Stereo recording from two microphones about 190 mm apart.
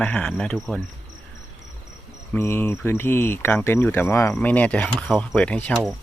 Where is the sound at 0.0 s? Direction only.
5° left (ahead or behind).